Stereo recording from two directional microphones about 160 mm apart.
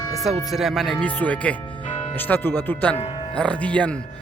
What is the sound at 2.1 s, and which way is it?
Speech, 10° left (ahead or behind).